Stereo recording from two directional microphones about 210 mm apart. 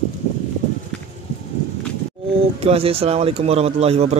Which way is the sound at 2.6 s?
30° right (ahead or behind).